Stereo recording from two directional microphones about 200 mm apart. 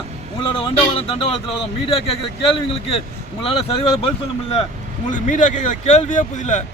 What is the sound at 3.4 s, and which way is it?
Speech, 30° left (ahead or behind).